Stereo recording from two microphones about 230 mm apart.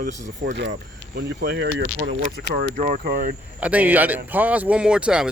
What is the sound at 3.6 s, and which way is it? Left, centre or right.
A man's voice, centre.